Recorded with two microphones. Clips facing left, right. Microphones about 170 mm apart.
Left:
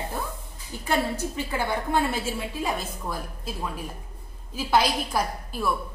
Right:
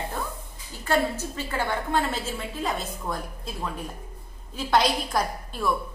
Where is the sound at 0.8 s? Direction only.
15° left (ahead or behind).